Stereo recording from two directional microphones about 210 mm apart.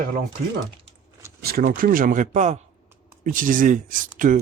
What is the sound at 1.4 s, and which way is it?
Speech, 45° right (ahead or behind).